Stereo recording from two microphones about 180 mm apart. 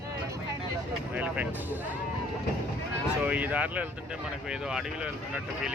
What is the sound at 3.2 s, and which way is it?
Speech, 10° right (ahead or behind).